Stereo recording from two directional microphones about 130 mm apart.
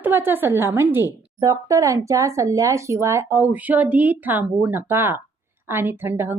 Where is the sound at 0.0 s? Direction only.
15° right (ahead or behind).